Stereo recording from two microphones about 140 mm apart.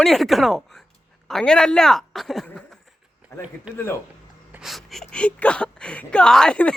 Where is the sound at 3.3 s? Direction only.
20° left (ahead or behind).